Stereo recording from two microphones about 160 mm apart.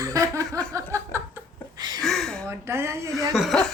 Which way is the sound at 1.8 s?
25° right (ahead or behind).